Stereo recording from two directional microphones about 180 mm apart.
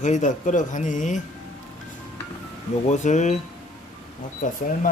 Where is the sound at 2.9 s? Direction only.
40° left (ahead or behind).